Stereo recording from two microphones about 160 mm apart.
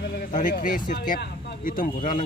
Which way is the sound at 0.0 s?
75° left (ahead or behind).